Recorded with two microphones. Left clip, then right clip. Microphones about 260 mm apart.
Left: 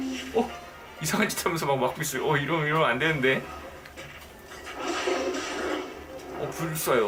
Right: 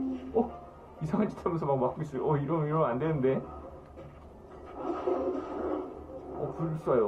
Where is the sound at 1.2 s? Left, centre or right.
Centre.